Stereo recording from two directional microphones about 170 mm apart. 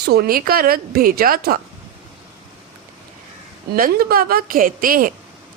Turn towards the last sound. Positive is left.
turn(degrees=-55)  # may be behind; listen again after turning